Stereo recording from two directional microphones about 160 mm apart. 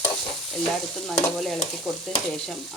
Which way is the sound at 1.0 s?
Centre (ahead or behind).